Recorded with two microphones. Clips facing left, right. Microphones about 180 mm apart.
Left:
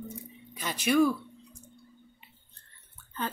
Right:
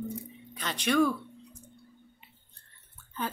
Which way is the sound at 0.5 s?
10° left (ahead or behind).